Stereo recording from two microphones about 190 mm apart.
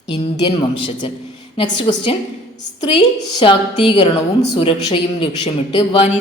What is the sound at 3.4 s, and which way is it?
A woman's voice, 25° left (ahead or behind).